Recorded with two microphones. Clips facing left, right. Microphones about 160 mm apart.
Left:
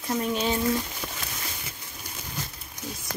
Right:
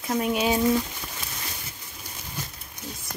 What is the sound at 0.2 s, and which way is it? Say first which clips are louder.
Speech: right 4 dB; 10° right (ahead or behind).